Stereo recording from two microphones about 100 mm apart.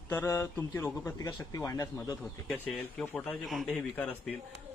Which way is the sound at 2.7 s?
10° left (ahead or behind).